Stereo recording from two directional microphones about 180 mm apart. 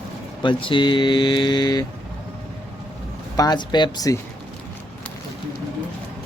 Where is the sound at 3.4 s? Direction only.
25° left (ahead or behind).